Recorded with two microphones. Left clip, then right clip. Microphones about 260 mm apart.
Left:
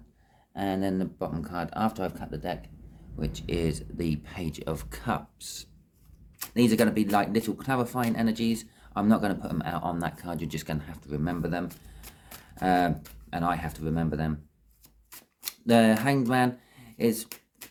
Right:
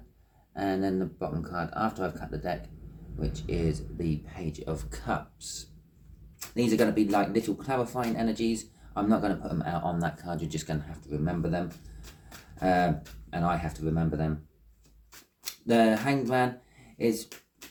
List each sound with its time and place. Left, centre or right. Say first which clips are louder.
0.5 s speech: even; left
15.4 s speech: left 2 dB; left